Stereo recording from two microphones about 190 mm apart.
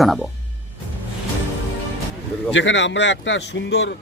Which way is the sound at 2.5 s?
75° left (ahead or behind).